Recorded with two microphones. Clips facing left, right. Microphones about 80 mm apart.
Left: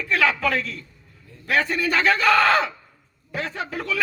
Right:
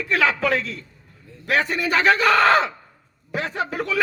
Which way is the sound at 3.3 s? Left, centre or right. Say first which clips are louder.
Right 3 dB; right.